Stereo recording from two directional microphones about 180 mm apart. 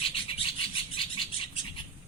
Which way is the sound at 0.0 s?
30° left (ahead or behind).